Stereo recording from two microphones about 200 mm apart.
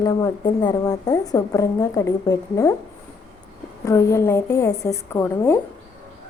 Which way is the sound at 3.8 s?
15° left (ahead or behind).